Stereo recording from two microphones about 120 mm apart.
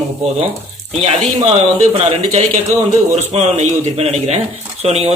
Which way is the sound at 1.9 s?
55° right (ahead or behind).